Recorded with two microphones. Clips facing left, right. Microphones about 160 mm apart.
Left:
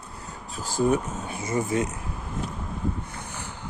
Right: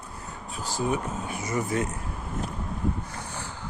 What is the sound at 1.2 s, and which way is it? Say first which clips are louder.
Speech: left 3 dB; 25° left (ahead or behind).